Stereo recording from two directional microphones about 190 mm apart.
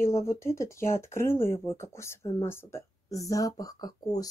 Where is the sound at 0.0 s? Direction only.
15° left (ahead or behind).